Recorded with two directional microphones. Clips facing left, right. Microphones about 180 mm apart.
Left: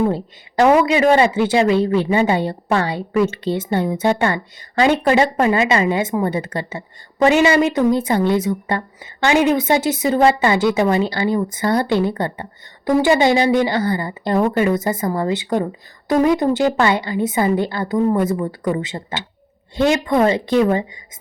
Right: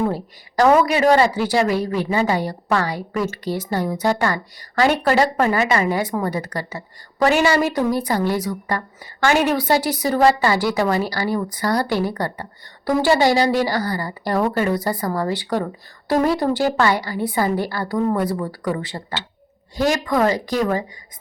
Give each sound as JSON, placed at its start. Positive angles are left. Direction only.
{"t": 0.9, "sound": "a woman's voice", "side_deg": 20}